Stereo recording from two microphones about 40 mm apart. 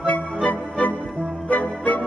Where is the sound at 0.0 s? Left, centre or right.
Left.